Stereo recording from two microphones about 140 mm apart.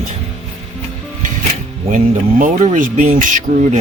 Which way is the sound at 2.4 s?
65° right (ahead or behind).